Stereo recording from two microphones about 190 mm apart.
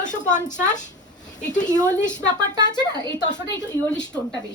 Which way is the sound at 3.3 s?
20° left (ahead or behind).